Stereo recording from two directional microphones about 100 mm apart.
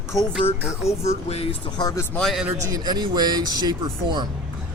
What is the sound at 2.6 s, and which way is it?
Speech, 35° right (ahead or behind).